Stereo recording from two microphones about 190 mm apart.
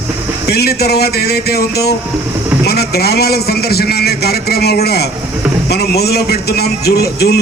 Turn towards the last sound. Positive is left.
turn(degrees=55)  # may be behind; listen again after turning